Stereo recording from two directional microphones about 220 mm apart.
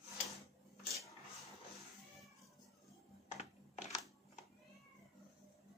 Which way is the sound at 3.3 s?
30° left (ahead or behind).